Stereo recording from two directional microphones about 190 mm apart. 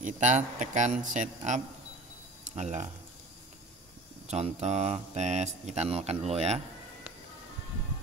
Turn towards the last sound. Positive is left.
turn(degrees=-35)  # may be behind; listen again after turning